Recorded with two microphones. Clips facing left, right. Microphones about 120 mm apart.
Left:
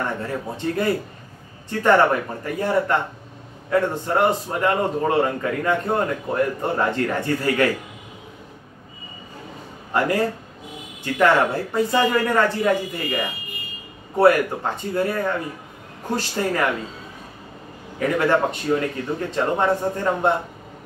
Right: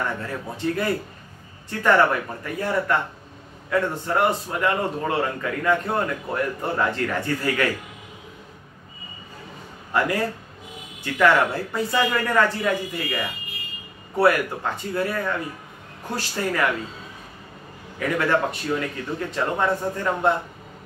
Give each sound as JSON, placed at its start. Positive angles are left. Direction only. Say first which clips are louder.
{"t": 0.0, "sound": "a man's voice", "louder": "left 2 dB", "side_deg": 25}
{"t": 9.9, "sound": "a man's voice", "louder": "left 2 dB", "side_deg": 30}
{"t": 17.9, "sound": "a man's voice", "louder": "left 3 dB", "side_deg": 25}